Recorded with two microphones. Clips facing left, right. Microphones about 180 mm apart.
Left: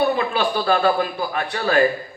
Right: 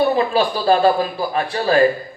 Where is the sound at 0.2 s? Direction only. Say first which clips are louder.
Right 4 dB; 30° right (ahead or behind).